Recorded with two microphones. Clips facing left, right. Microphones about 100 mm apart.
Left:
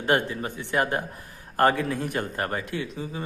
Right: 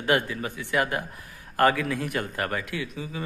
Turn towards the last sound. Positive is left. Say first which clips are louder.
# left 1 dB
turn(degrees=35)  # may be behind; listen again after turning